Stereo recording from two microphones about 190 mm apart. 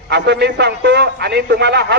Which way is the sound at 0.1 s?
60° right (ahead or behind).